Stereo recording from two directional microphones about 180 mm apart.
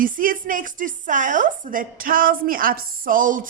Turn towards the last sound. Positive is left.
turn(degrees=-50)  # may be behind; listen again after turning